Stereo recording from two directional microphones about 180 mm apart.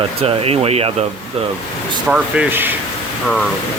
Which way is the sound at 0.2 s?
35° right (ahead or behind).